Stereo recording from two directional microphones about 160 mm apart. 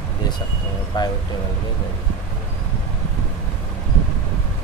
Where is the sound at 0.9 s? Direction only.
25° left (ahead or behind).